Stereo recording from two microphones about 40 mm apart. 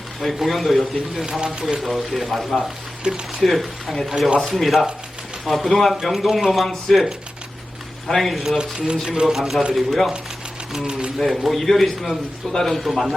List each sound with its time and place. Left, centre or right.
0.3 s a man's voice: centre
3.1 s speech: right
3.4 s a man's voice: centre
5.9 s a man's voice: centre
8.5 s a man's voice: centre
11.2 s a man's voice: centre